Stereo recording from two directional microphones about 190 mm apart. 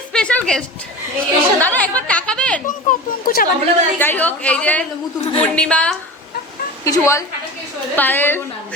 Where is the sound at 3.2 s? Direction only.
50° left (ahead or behind).